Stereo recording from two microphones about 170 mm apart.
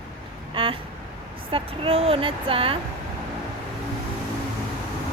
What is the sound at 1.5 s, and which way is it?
A woman's voice, 30° right (ahead or behind).